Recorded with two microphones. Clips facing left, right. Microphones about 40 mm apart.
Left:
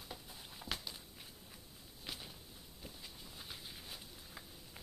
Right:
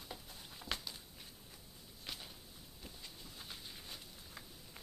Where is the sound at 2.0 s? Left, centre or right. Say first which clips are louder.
Even; centre.